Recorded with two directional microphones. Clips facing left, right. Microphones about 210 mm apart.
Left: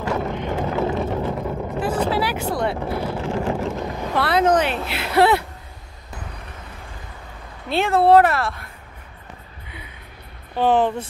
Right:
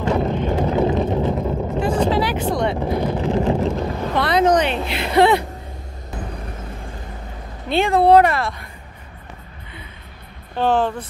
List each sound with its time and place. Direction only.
0.0 s boat: 25° right (ahead or behind)
0.5 s vehicle: 15° right (ahead or behind)
1.8 s vehicle: 5° left (ahead or behind)
2.8 s vehicle: 15° right (ahead or behind)
4.0 s vehicle: 5° left (ahead or behind)
7.7 s speech: centre (ahead or behind)
10.5 s speech: 15° left (ahead or behind)